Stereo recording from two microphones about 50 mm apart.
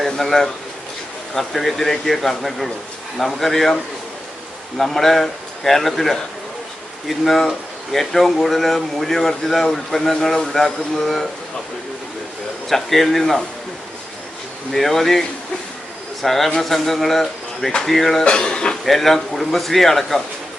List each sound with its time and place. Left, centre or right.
0.0 s speech: centre
4.8 s speech: centre
12.6 s speech: centre
14.7 s speech: centre
16.2 s speech: centre
18.9 s speech: centre